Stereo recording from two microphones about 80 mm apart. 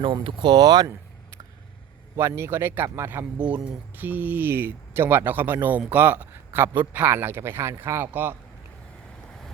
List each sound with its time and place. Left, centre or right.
0.0 s speech: right
2.1 s a man's voice: right
3.3 s a man's voice: centre